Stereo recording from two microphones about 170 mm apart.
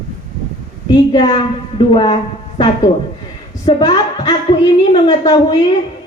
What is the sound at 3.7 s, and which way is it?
A woman's voice, 25° left (ahead or behind).